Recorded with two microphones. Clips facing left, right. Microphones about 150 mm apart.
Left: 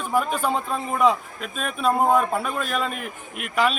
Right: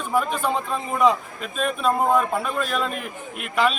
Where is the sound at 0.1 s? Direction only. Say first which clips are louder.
Even; 5° left (ahead or behind).